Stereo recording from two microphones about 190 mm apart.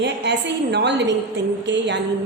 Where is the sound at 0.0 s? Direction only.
65° right (ahead or behind).